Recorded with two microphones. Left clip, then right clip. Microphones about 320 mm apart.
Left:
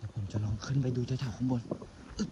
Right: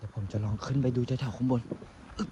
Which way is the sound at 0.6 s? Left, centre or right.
Centre.